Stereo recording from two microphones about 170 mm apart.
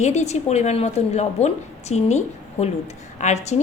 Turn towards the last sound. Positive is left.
turn(degrees=40)  # may be behind; listen again after turning